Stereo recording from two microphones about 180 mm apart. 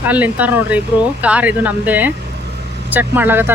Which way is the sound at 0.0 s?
10° right (ahead or behind).